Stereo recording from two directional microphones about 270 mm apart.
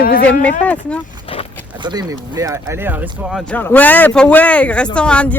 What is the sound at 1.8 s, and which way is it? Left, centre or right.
Speech, centre.